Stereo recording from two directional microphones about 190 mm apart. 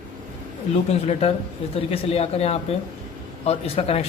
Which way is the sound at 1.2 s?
30° left (ahead or behind).